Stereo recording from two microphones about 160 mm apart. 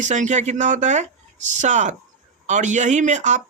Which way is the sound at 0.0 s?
50° right (ahead or behind).